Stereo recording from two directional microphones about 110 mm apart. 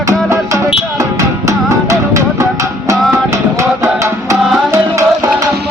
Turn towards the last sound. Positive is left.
turn(degrees=-30)  # may be behind; listen again after turning